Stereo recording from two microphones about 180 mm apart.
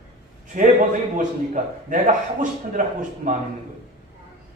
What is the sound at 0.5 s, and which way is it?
A man's voice, 45° right (ahead or behind).